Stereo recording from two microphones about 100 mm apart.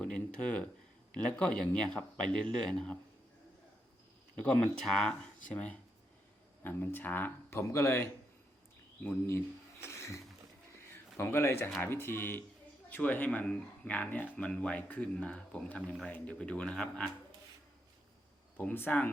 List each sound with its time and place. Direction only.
0.0 s speech: 10° left (ahead or behind)
4.7 s speech: 5° left (ahead or behind)
7.6 s speech: 30° left (ahead or behind)
9.8 s music: 30° left (ahead or behind)
10.9 s speech: 25° left (ahead or behind); by 17.1 s 10° left (ahead or behind)
18.5 s speech: 20° left (ahead or behind)